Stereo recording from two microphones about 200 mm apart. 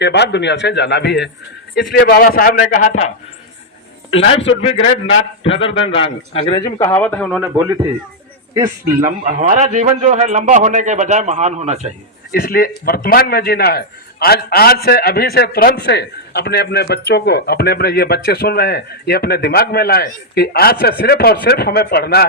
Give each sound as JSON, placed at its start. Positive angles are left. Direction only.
{"t": 0.0, "sound": "a man's voice", "side_deg": 60}
{"t": 4.2, "sound": "a man's voice", "side_deg": 30}
{"t": 5.9, "sound": "a man's voice", "side_deg": 30}
{"t": 6.7, "sound": "a man's voice", "side_deg": 15}
{"t": 7.6, "sound": "a man's voice", "side_deg": -15}
{"t": 8.6, "sound": "a man's voice", "side_deg": -40}
{"t": 12.3, "sound": "a man's voice", "side_deg": 45}